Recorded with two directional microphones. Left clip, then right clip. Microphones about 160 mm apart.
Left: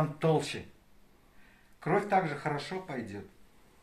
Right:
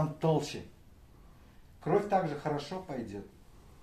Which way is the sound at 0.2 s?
35° right (ahead or behind).